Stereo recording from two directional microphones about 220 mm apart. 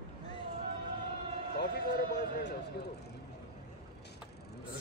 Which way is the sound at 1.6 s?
50° left (ahead or behind).